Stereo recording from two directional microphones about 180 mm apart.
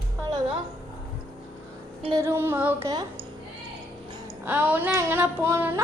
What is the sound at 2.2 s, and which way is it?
Speech, 15° right (ahead or behind).